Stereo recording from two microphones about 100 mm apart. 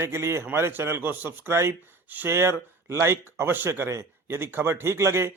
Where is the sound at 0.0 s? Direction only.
25° right (ahead or behind).